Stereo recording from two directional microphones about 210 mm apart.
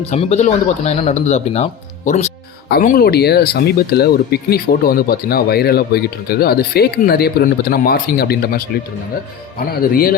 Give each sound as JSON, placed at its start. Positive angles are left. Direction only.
{"t": 0.0, "sound": "speech", "side_deg": 30}
{"t": 2.6, "sound": "speech", "side_deg": 45}
{"t": 9.9, "sound": "speech", "side_deg": 45}